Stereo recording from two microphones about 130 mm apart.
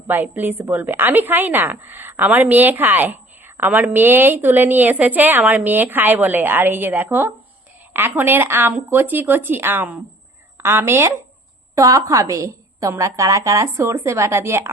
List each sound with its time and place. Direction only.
0.1 s a woman's voice: 15° right (ahead or behind)